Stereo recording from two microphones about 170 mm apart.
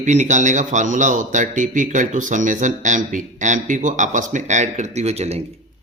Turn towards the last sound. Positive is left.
turn(degrees=-40)  # may be behind; listen again after turning